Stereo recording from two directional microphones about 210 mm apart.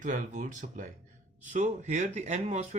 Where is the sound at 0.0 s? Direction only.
35° right (ahead or behind).